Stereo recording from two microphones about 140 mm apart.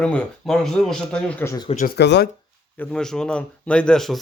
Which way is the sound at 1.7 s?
90° left.